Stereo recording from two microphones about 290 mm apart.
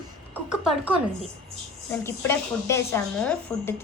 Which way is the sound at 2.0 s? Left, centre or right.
Centre.